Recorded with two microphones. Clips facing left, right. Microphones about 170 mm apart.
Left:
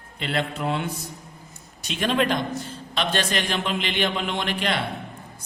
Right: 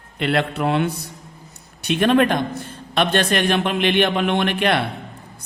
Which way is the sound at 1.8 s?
60° right (ahead or behind).